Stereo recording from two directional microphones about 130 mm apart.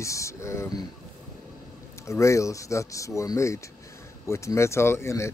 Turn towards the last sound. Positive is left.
turn(degrees=20)  # may be behind; listen again after turning